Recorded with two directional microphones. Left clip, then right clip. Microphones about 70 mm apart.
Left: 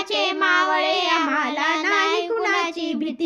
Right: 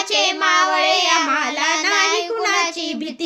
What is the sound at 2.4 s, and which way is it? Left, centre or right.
Child singing, right.